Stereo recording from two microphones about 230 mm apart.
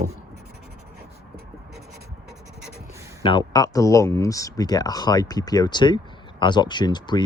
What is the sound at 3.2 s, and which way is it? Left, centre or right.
Speech, centre.